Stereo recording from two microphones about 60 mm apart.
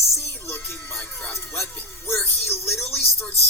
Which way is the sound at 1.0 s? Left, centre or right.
Left.